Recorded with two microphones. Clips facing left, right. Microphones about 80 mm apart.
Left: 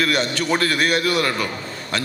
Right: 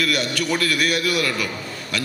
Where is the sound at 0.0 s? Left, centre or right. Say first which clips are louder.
Left 2 dB; left.